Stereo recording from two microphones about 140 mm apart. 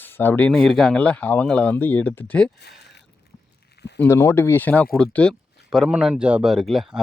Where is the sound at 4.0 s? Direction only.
20° left (ahead or behind).